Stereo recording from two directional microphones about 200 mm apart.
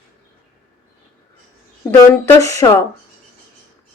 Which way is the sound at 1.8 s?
15° left (ahead or behind).